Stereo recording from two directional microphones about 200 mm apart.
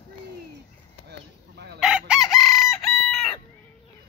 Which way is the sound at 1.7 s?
5° right (ahead or behind).